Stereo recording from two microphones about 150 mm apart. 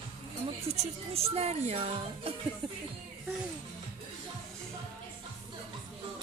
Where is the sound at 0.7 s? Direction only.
40° right (ahead or behind).